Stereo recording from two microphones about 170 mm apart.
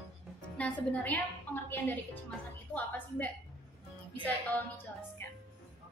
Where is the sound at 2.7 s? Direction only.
10° left (ahead or behind).